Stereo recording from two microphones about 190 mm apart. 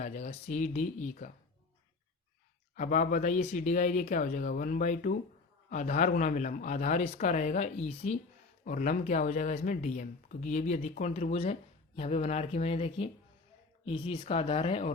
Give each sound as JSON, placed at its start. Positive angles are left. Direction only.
{"t": 0.0, "sound": "speech", "side_deg": 35}
{"t": 2.7, "sound": "speech", "side_deg": 40}